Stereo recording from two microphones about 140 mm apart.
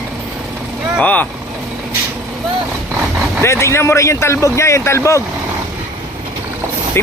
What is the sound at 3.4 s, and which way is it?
Speech, 20° left (ahead or behind).